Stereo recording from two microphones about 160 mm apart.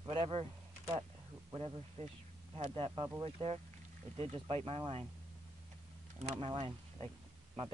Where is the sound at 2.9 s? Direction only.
20° right (ahead or behind).